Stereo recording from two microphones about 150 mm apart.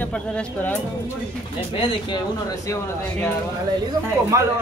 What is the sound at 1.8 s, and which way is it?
Speech, 35° left (ahead or behind).